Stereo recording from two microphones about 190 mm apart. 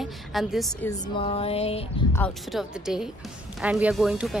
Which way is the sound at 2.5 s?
Centre (ahead or behind).